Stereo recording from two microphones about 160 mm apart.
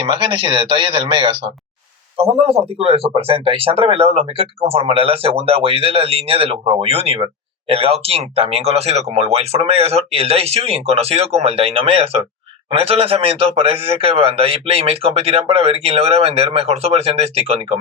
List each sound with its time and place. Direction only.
0.0 s a man's voice: 35° right (ahead or behind)